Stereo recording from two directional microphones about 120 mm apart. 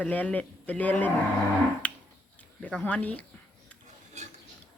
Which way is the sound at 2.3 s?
10° left (ahead or behind).